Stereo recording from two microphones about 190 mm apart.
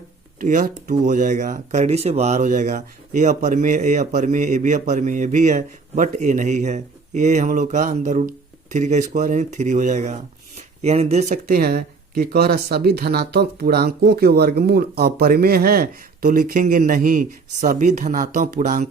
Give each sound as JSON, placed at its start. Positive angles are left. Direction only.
{"t": 0.3, "sound": "speech", "side_deg": -45}